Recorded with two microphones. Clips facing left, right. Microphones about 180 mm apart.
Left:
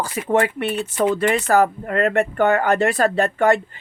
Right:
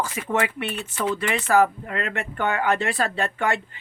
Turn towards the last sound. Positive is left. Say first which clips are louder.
# left 8 dB
turn(degrees=40)  # may be behind; listen again after turning